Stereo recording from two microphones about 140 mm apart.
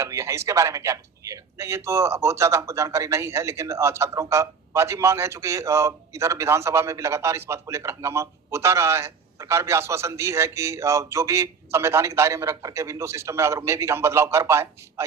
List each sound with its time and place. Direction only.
0.0 s a man's voice: 20° right (ahead or behind)